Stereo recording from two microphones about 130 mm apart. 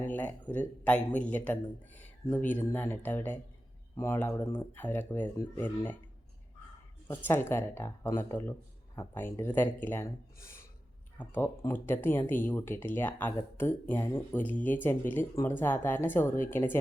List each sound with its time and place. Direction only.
0.0 s a man's voice: 15° left (ahead or behind)
7.1 s speech: 15° left (ahead or behind)
10.4 s a sound: 20° left (ahead or behind)
11.2 s speech: 15° left (ahead or behind)